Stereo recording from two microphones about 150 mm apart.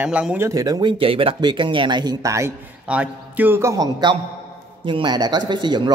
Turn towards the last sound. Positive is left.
turn(degrees=-30)  # may be behind; listen again after turning